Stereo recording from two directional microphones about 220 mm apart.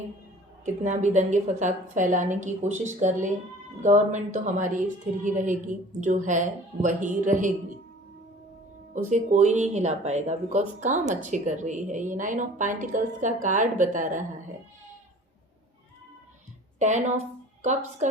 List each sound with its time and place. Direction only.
0.6 s speech: 35° right (ahead or behind)
9.0 s speech: 35° right (ahead or behind)
16.8 s a woman's voice: 30° right (ahead or behind)